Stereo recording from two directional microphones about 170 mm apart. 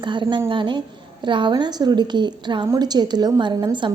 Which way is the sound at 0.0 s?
25° right (ahead or behind).